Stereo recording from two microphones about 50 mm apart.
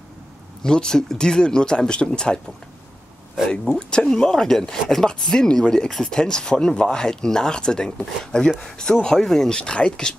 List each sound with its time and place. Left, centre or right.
0.6 s speech: centre
3.7 s speech: left
4.0 s speech: centre
9.6 s speech: left